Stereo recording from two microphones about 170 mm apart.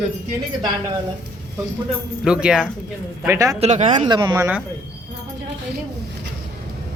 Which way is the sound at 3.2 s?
15° right (ahead or behind).